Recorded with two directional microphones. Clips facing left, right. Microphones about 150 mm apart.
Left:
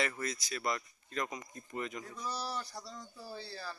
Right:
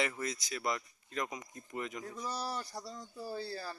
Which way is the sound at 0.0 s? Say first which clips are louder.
Even; 15° right (ahead or behind).